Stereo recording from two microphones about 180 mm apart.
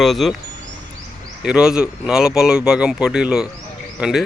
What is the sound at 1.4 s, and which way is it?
Speech, 5° right (ahead or behind).